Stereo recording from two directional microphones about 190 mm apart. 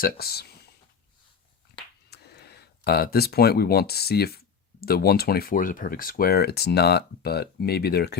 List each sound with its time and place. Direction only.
0.0 s speech: 55° left (ahead or behind)
2.0 s speech: 60° left (ahead or behind)